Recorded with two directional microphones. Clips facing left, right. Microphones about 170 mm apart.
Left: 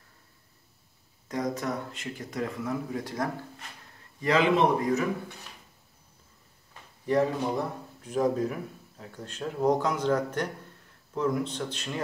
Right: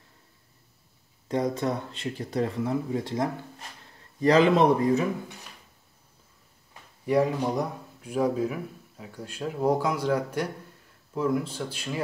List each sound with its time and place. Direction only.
1.3 s speech: 30° right (ahead or behind)
4.2 s speech: 35° right (ahead or behind)
7.1 s speech: 10° right (ahead or behind)